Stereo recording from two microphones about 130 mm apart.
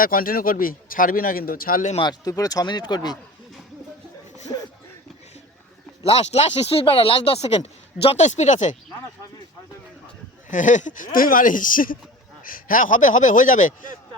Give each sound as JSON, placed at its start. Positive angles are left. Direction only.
{"t": 0.0, "sound": "speech", "side_deg": 90}
{"t": 2.0, "sound": "speech", "side_deg": 30}
{"t": 6.0, "sound": "speech", "side_deg": 50}
{"t": 10.5, "sound": "speech", "side_deg": 75}